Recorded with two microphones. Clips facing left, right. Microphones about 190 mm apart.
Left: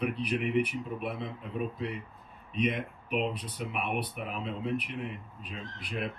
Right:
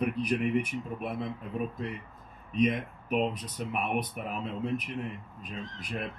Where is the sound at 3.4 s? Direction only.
45° right (ahead or behind).